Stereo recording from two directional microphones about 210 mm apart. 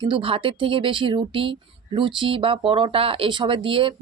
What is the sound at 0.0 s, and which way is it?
Speech, 25° right (ahead or behind).